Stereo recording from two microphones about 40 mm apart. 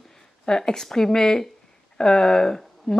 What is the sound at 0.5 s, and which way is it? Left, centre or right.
Speech, centre.